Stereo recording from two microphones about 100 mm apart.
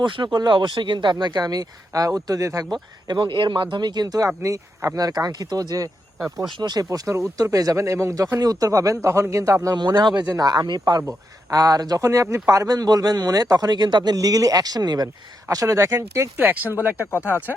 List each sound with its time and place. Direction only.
0.0 s speech: 50° right (ahead or behind); by 2.6 s 35° right (ahead or behind)
3.1 s a man's voice: 50° right (ahead or behind); by 9.7 s 30° right (ahead or behind)
9.7 s a man's voice: 45° right (ahead or behind)
16.4 s speech: 20° right (ahead or behind)
17.0 s speech: 25° left (ahead or behind)